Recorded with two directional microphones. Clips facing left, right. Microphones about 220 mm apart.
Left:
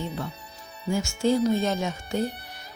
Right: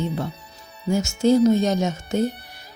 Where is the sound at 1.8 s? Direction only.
40° right (ahead or behind).